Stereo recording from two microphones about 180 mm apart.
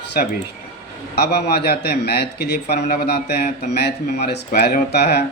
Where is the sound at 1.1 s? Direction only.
65° left (ahead or behind).